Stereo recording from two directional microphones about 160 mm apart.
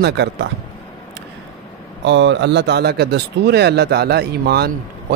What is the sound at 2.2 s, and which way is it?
Speech, 90° right.